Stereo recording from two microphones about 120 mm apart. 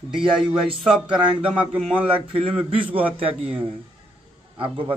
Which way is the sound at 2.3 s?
50° right (ahead or behind).